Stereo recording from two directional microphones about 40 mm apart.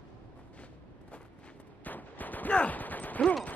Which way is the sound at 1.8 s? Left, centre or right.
Left.